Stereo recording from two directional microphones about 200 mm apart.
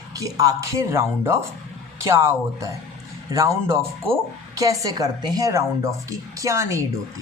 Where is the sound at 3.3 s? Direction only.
15° right (ahead or behind).